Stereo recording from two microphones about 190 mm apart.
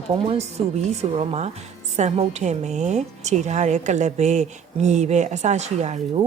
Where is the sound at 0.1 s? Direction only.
30° right (ahead or behind).